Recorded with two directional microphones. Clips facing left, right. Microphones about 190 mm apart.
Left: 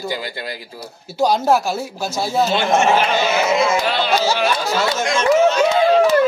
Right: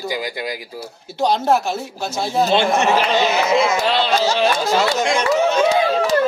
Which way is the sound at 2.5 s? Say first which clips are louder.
Right 1 dB; 30° right (ahead or behind).